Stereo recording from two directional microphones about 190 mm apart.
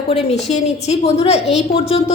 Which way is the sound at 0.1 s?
35° left (ahead or behind).